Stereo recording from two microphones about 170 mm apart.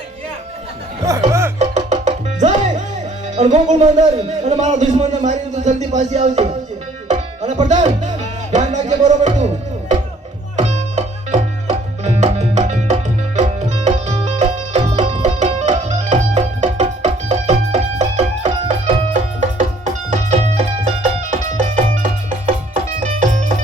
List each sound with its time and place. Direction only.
1.3 s music: 15° right (ahead or behind)
1.5 s music: 40° right (ahead or behind)
3.3 s a man's voice: 40° right (ahead or behind)
7.1 s music: 40° right (ahead or behind)
10.6 s music: 40° right (ahead or behind)